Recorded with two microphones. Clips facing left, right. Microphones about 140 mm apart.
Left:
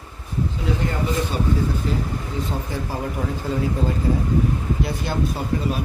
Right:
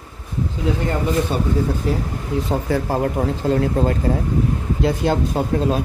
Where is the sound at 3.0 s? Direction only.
80° right.